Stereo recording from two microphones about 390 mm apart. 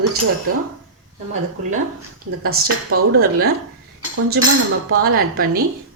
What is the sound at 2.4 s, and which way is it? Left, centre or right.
A woman's voice, right.